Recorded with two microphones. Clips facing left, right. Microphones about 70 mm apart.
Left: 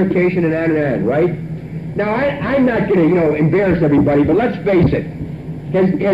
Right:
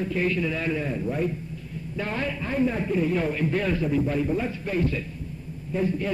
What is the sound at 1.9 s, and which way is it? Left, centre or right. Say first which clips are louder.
A man's voice: left 13 dB; left.